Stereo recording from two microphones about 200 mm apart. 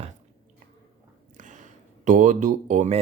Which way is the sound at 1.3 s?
40° right (ahead or behind).